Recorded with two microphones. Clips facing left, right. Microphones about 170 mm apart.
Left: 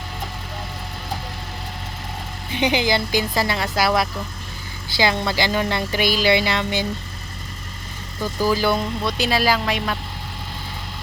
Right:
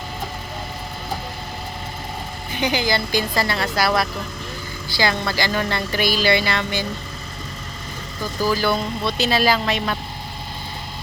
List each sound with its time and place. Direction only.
2.6 s speech: 25° left (ahead or behind)
8.4 s speech: 20° left (ahead or behind)